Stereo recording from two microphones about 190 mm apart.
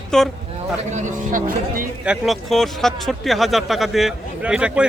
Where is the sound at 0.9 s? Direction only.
40° right (ahead or behind).